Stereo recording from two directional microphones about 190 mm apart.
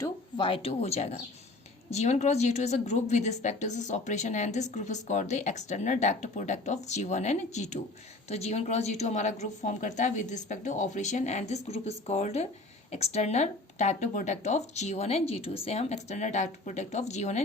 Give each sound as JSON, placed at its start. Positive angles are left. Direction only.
{"t": 0.3, "sound": "a woman's voice", "side_deg": 25}